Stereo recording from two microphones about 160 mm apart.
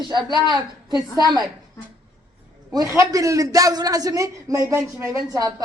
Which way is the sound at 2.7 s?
20° right (ahead or behind).